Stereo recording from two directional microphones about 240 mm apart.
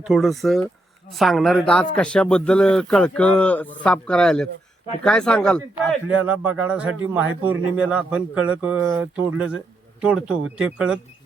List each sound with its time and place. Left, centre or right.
0.0 s speech: centre